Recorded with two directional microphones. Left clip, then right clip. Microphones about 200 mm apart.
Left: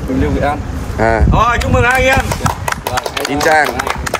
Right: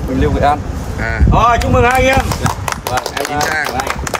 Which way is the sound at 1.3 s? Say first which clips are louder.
Right 1 dB; 45° right (ahead or behind).